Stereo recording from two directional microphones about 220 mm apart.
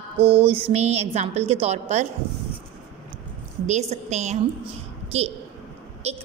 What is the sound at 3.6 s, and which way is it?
A woman's voice, 30° right (ahead or behind).